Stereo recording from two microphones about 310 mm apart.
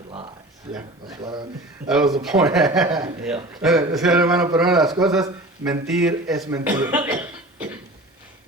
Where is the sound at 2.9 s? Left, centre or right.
Centre.